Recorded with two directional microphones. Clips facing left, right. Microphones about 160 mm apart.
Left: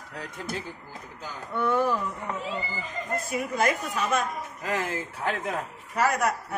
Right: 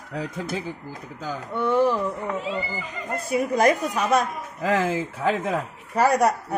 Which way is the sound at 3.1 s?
40° right (ahead or behind).